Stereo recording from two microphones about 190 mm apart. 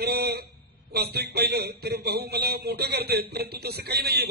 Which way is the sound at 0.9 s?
60° right (ahead or behind).